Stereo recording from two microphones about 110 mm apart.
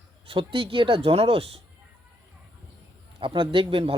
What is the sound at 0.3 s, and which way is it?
Speech, 55° right (ahead or behind).